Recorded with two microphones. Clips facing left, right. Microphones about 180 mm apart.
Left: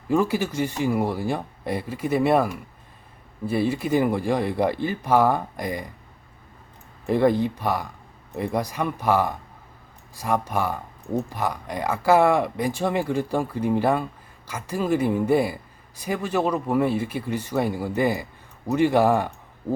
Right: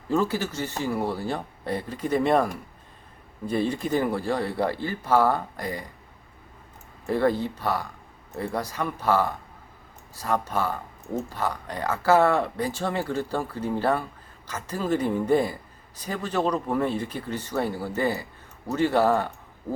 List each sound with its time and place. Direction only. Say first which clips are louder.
0.1 s speech: left 3 dB; 10° left (ahead or behind)
7.1 s speech: left 4 dB; 15° left (ahead or behind)